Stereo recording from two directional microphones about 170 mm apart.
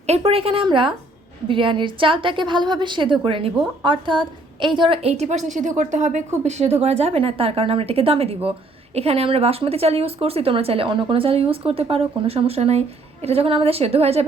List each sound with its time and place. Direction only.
0.0 s a woman's voice: 35° right (ahead or behind)